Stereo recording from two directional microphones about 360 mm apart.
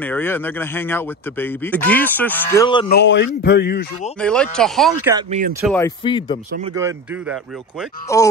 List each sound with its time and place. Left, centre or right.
0.0 s speech: centre
2.9 s speech: left
4.2 s speech: centre
5.1 s speech: centre
5.7 s speech: centre
6.7 s speech: centre
8.1 s speech: centre